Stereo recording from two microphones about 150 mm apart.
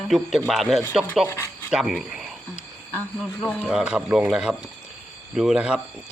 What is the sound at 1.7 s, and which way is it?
Speech, 5° right (ahead or behind).